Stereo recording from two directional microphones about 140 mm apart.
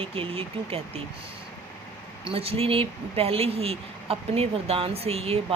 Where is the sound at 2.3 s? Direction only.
45° right (ahead or behind).